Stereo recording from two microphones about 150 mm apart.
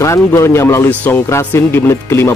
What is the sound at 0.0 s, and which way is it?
Speech, 20° left (ahead or behind).